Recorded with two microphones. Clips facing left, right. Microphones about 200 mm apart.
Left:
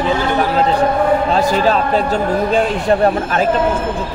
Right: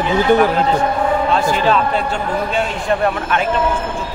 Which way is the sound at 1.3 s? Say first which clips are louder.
Left 1 dB; 40° left (ahead or behind).